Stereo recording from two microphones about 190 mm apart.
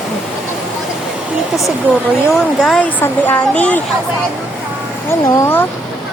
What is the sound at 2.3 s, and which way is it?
Speech, centre (ahead or behind).